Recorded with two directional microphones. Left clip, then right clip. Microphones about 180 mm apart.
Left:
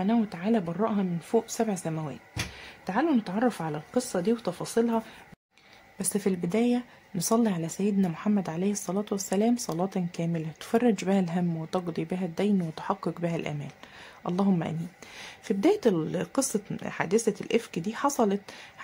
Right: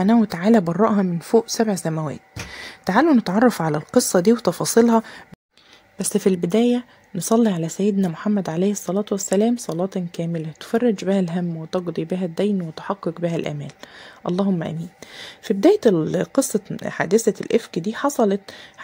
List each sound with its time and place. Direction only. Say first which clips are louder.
0.0 s speech: right 10 dB; 45° right (ahead or behind)
2.8 s speech: right 10 dB; 45° right (ahead or behind)
5.9 s speech: right 9 dB; 35° right (ahead or behind)